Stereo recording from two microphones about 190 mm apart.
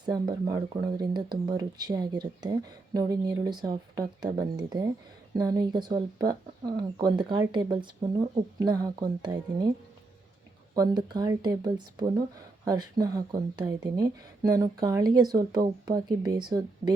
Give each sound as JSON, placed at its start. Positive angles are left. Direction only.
{"t": 0.0, "sound": "speech", "side_deg": -20}
{"t": 10.8, "sound": "speech", "side_deg": -20}